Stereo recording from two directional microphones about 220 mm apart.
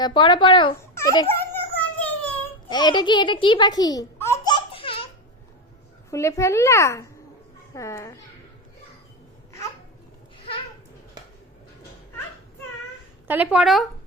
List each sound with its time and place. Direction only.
0.0 s a child's voice: 20° left (ahead or behind)
1.4 s a sound: 10° left (ahead or behind)
2.6 s a child's voice: 20° left (ahead or behind)
6.1 s a child's voice: 15° left (ahead or behind)
13.2 s speech: 10° right (ahead or behind)